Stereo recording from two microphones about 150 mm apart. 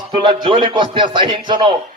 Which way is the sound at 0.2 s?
35° right (ahead or behind).